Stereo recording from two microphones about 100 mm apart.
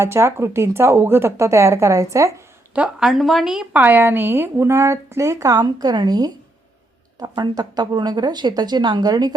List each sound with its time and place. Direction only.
0.0 s speech: 25° right (ahead or behind)
2.7 s a woman's voice: 5° right (ahead or behind)
3.8 s speech: 20° right (ahead or behind); by 9.3 s 40° right (ahead or behind)